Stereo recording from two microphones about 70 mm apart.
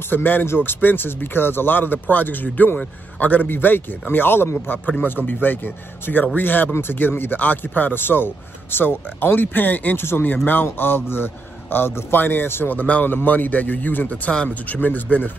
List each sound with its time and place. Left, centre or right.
0.1 s speech: left